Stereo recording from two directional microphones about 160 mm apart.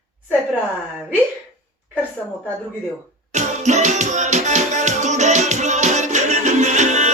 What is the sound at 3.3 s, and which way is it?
Music, 45° right (ahead or behind).